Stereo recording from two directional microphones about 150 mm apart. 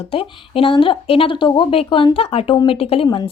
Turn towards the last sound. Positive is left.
turn(degrees=25)  # may be behind; listen again after turning